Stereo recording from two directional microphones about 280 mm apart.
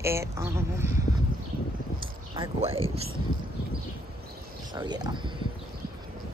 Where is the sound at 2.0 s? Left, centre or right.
Right.